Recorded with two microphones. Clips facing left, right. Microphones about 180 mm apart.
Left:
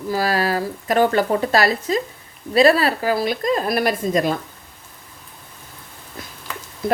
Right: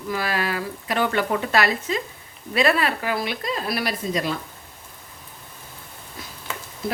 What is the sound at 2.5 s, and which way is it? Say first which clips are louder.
Speech: left 6 dB; 35° left (ahead or behind).